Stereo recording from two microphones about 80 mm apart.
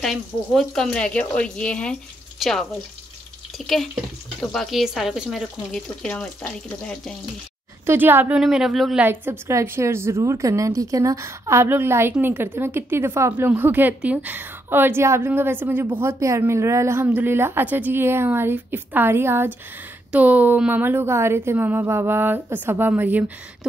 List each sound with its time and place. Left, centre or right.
0.0 s speech: centre
2.3 s speech: centre
6.0 s speech: centre
7.8 s a woman's voice: right
8.4 s speech: centre
9.0 s a woman's voice: right
9.5 s a woman's voice: right
20.1 s a woman's voice: centre